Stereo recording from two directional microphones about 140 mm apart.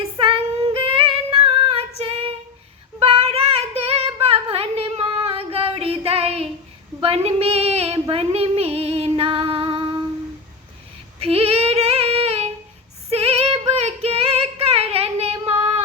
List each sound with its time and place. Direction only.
0.0 s child singing: 40° right (ahead or behind)
7.0 s female singing: 45° right (ahead or behind)
8.1 s music: 45° right (ahead or behind)
11.2 s female singing: 45° right (ahead or behind)